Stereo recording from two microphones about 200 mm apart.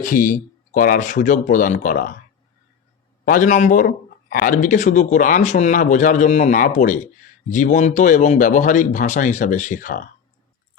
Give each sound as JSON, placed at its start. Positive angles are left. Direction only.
{"t": 0.0, "sound": "speech", "side_deg": 40}
{"t": 3.2, "sound": "speech", "side_deg": 40}